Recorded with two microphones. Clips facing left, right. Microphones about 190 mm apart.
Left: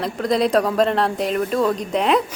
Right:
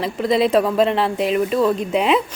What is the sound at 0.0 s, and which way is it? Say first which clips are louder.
Speech: right 2 dB; centre (ahead or behind).